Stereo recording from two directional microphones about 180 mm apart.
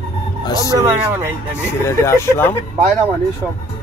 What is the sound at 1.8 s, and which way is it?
Speech, 15° left (ahead or behind).